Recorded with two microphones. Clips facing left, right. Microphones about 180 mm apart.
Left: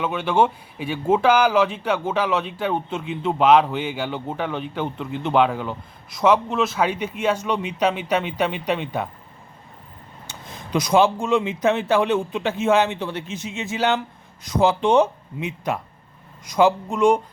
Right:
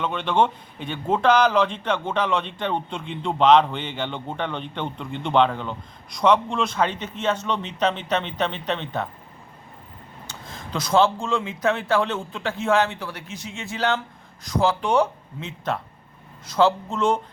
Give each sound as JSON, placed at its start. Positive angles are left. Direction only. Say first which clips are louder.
{"t": 0.0, "sound": "speech", "louder": "left 2 dB", "side_deg": 5}
{"t": 10.2, "sound": "speech", "louder": "even", "side_deg": 20}